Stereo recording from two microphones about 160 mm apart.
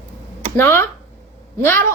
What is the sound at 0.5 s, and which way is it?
A child's voice, 15° left (ahead or behind).